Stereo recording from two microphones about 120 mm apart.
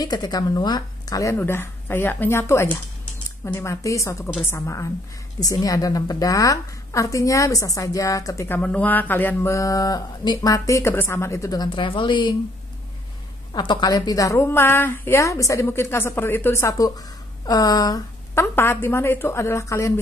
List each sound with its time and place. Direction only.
0.0 s speech: 30° left (ahead or behind)
1.3 s speech: 20° left (ahead or behind)
8.5 s speech: 10° left (ahead or behind); by 12.4 s 40° left (ahead or behind)
13.5 s speech: 40° left (ahead or behind); by 19.9 s 25° left (ahead or behind)